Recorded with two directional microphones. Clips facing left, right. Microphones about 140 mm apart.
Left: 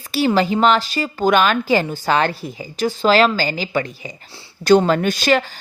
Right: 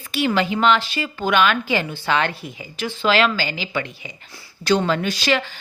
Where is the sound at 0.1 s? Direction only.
35° left (ahead or behind).